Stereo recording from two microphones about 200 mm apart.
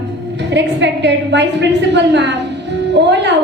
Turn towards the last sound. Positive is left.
turn(degrees=-60)  # may be behind; listen again after turning